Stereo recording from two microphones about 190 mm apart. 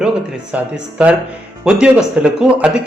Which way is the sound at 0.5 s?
5° right (ahead or behind).